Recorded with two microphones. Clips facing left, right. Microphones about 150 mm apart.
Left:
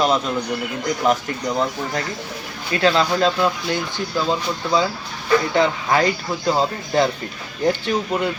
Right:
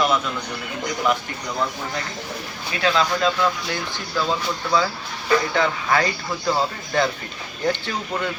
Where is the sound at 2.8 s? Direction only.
35° left (ahead or behind).